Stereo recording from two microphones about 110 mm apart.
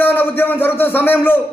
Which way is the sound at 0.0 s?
15° left (ahead or behind).